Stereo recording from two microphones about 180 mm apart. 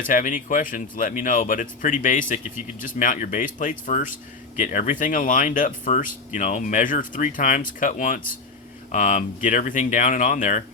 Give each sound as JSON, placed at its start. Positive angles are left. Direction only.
{"t": 0.1, "sound": "speech", "side_deg": 50}